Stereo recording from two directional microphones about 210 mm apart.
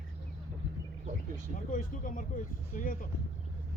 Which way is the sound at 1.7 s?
40° left (ahead or behind).